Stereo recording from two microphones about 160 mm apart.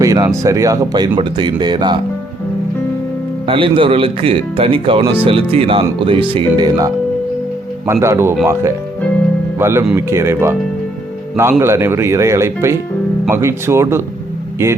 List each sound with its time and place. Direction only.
0.0 s speech: 20° right (ahead or behind)
3.4 s speech: 35° right (ahead or behind); by 8.4 s 15° right (ahead or behind)
9.6 s speech: 15° right (ahead or behind)